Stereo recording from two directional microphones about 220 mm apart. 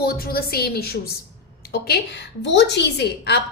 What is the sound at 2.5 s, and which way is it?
Speech, 50° left (ahead or behind).